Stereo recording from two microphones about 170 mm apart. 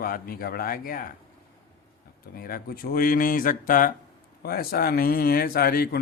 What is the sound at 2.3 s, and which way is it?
Speech, 60° left (ahead or behind).